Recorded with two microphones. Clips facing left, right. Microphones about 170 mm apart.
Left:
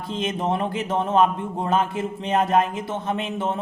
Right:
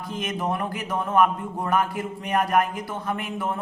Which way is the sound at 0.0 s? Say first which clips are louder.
Left 3 dB; 25° left (ahead or behind).